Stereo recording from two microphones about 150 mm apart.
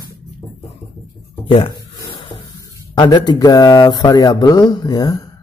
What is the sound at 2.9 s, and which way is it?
A man's voice, 30° left (ahead or behind).